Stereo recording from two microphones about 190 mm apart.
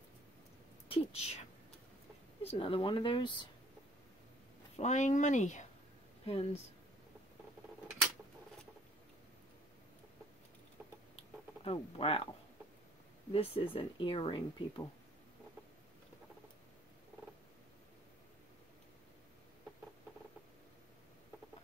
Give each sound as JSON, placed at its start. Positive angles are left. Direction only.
{"t": 0.8, "sound": "a sound", "side_deg": 30}
{"t": 2.5, "sound": "speech", "side_deg": 25}
{"t": 4.7, "sound": "speech", "side_deg": 40}
{"t": 11.6, "sound": "speech", "side_deg": 30}
{"t": 13.3, "sound": "speech", "side_deg": 30}